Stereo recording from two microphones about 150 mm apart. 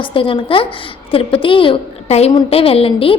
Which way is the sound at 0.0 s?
35° left (ahead or behind).